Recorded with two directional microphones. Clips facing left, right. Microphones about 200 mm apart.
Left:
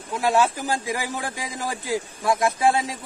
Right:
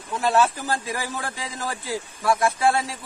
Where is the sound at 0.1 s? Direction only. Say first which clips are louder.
Even; 15° left (ahead or behind).